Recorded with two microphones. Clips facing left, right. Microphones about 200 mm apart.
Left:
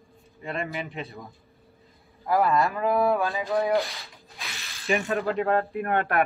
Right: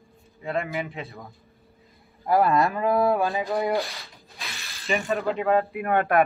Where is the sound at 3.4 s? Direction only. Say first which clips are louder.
Left 1 dB; centre (ahead or behind).